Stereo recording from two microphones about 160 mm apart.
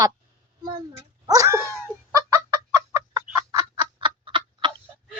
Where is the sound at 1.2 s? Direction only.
20° right (ahead or behind).